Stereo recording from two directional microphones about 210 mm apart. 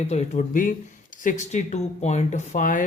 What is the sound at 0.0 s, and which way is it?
Speech, 30° left (ahead or behind).